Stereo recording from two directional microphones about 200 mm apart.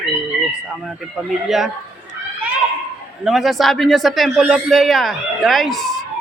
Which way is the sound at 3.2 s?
Centre (ahead or behind).